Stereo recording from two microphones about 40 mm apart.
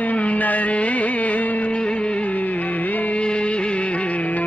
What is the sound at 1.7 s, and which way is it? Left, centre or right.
Music, left.